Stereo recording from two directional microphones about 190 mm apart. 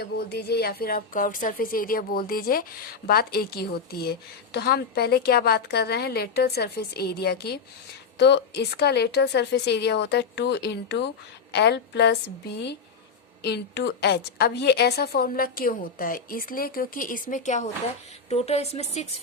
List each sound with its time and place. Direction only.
0.0 s a woman's voice: 60° left (ahead or behind); by 18.9 s 35° left (ahead or behind)